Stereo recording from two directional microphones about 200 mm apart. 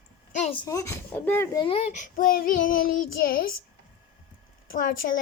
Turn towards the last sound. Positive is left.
turn(degrees=45)  # may be behind; listen again after turning